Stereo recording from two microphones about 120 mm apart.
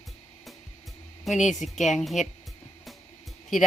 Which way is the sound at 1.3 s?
Centre (ahead or behind).